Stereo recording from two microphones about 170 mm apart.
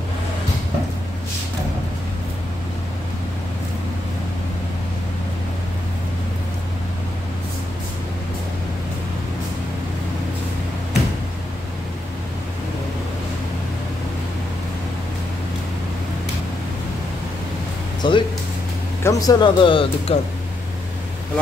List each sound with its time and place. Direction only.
18.0 s music: 25° left (ahead or behind)
19.0 s speech: 20° left (ahead or behind)